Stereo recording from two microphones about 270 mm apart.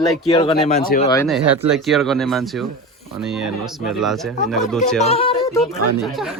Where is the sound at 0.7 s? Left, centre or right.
Left.